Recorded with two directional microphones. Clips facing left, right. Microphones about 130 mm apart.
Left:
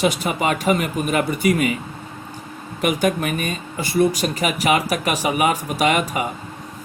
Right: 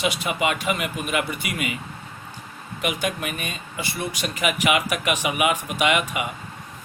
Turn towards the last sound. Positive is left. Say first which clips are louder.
# left 3 dB
turn(degrees=40)  # may be behind; listen again after turning